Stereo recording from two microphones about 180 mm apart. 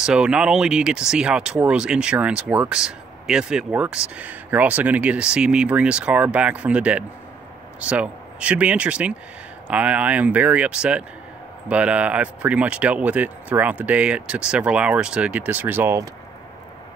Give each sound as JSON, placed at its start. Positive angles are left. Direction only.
{"t": 0.0, "sound": "speech", "side_deg": -5}